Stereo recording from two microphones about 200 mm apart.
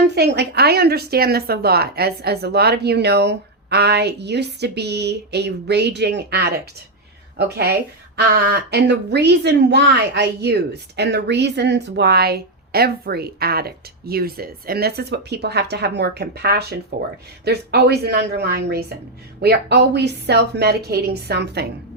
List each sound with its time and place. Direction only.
0.1 s a woman's voice: 55° right (ahead or behind)